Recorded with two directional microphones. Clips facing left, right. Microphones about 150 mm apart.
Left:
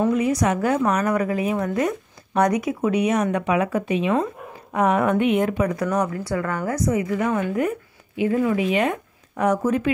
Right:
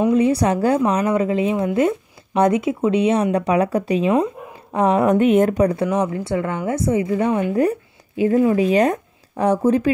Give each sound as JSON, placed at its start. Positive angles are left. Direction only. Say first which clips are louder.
{"t": 0.1, "sound": "speech", "louder": "right 4 dB", "side_deg": -30}